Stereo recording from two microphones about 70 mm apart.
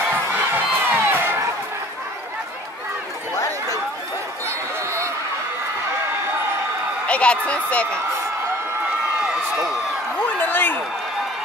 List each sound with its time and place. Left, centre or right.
0.1 s crowd: right
3.3 s chatter: left
4.5 s chatter: right
7.1 s a woman's voice: centre
10.4 s a sound: left